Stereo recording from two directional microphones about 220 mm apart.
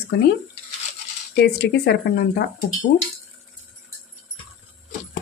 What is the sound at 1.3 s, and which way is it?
Speech, 50° left (ahead or behind).